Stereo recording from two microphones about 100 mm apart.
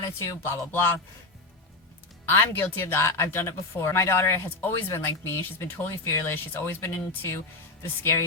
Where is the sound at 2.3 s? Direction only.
25° left (ahead or behind).